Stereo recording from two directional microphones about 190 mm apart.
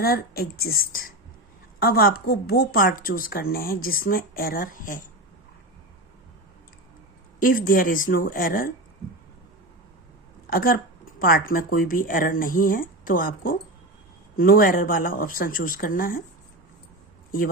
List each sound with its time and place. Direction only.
0.0 s speech: 55° left (ahead or behind)
7.3 s speech: 45° left (ahead or behind)
10.4 s speech: 50° left (ahead or behind)